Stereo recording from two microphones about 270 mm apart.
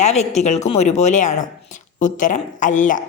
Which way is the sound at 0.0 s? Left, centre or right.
Left.